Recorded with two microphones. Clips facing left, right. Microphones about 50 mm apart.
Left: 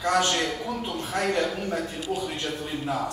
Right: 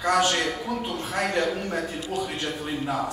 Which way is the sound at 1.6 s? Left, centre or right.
Right.